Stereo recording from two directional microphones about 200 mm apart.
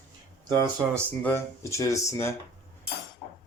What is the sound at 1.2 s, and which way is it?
Speech, 10° left (ahead or behind).